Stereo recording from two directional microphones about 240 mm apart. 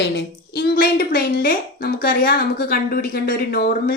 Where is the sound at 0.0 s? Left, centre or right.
Left.